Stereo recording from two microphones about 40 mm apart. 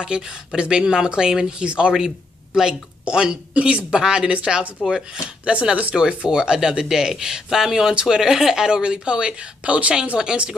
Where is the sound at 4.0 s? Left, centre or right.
Centre.